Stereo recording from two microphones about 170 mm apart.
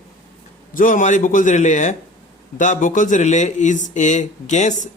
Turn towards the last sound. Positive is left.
turn(degrees=45)  # may be behind; listen again after turning